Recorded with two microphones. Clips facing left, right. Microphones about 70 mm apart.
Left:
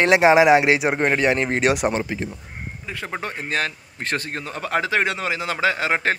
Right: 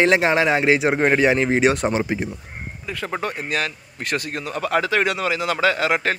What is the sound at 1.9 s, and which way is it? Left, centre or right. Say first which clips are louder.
Speech: right 3 dB; centre.